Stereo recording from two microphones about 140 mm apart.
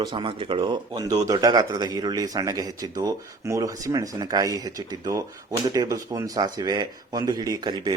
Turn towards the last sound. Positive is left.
turn(degrees=-30)  # may be behind; listen again after turning